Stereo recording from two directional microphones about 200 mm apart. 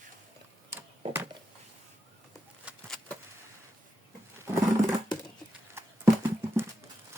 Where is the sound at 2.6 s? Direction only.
Centre (ahead or behind).